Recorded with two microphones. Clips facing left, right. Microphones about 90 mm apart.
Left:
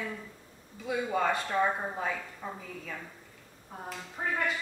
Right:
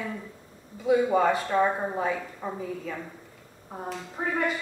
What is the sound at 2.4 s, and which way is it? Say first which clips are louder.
Speech: right 5 dB; 25° right (ahead or behind).